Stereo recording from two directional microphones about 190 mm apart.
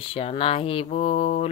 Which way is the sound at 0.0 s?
30° left (ahead or behind).